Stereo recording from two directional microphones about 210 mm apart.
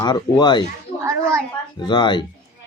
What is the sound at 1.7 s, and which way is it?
Speech, 20° left (ahead or behind).